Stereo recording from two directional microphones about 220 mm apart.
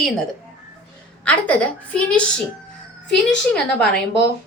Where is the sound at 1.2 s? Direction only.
5° left (ahead or behind).